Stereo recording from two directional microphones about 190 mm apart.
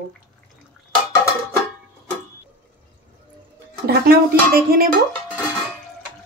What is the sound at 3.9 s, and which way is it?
A woman's voice, 50° right (ahead or behind).